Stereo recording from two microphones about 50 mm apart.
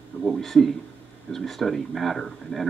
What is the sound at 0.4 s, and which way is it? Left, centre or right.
Speech, centre.